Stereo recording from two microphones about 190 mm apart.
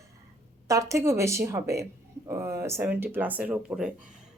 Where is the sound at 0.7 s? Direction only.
15° right (ahead or behind).